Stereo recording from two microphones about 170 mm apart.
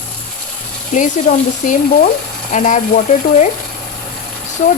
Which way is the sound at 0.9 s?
45° left (ahead or behind).